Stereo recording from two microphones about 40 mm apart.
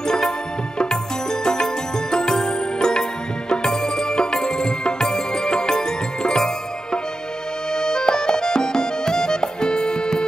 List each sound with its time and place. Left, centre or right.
1.4 s music: centre